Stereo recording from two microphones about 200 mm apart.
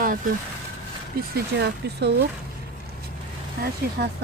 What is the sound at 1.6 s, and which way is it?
Speech, 55° right (ahead or behind).